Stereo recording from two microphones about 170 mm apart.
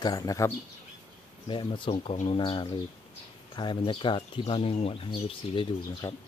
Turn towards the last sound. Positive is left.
turn(degrees=30)  # may be behind; listen again after turning